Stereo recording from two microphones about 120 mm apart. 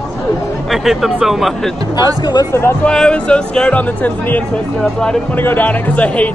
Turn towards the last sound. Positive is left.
turn(degrees=10)  # may be behind; listen again after turning